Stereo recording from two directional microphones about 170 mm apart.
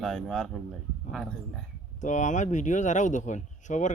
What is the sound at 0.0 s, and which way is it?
Speech, 5° left (ahead or behind).